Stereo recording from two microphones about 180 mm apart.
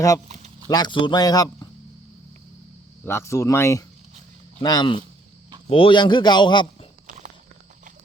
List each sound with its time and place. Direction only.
0.7 s a man's voice: 25° left (ahead or behind)
3.0 s a man's voice: 15° left (ahead or behind)